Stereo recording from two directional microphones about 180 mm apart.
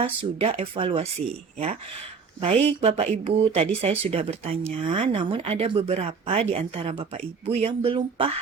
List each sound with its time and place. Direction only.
0.0 s speech: 30° right (ahead or behind)
2.4 s speech: 35° right (ahead or behind)